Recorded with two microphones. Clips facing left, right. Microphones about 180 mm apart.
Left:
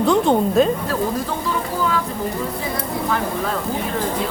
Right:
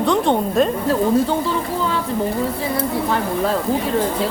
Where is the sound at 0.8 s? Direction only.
30° right (ahead or behind).